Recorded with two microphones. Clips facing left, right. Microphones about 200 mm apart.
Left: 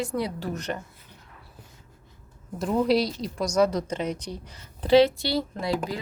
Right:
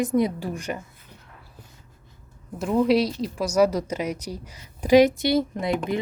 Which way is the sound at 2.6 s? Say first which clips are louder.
Right 2 dB; centre (ahead or behind).